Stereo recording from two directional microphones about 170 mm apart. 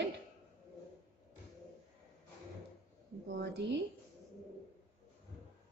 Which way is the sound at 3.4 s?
85° right.